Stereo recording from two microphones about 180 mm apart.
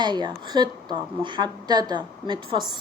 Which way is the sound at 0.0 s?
25° right (ahead or behind).